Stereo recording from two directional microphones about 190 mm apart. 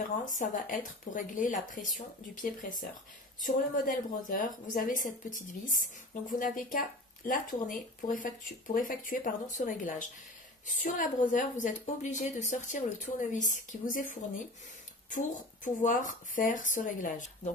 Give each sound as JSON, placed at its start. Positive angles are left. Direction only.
{"t": 0.2, "sound": "a woman's voice", "side_deg": 45}
{"t": 8.7, "sound": "a woman's voice", "side_deg": 45}